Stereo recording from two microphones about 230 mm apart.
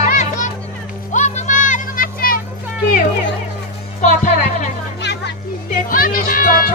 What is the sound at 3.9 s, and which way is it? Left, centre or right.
Music, left.